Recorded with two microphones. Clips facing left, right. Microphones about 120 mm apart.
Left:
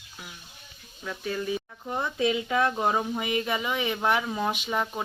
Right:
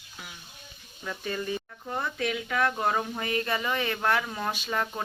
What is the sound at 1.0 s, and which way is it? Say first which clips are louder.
Speech: left 2 dB; 5° left (ahead or behind).